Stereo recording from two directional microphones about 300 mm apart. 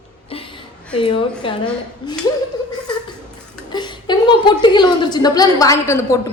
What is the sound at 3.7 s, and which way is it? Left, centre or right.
A woman's voice, centre.